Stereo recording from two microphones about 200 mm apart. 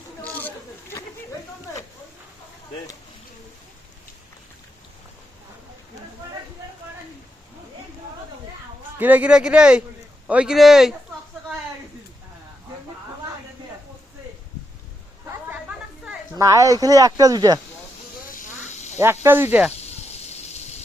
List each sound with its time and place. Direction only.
0.3 s chatter: 10° left (ahead or behind)
9.0 s speech: 10° right (ahead or behind)
16.3 s speech: 15° right (ahead or behind)
18.3 s a sound: 40° left (ahead or behind)
19.2 s speech: 10° right (ahead or behind)
19.7 s snake: 30° left (ahead or behind)